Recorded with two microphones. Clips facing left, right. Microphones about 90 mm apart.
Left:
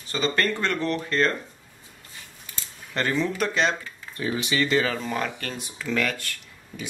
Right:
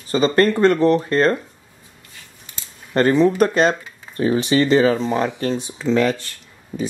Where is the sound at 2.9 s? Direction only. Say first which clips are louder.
Right 11 dB; 40° right (ahead or behind).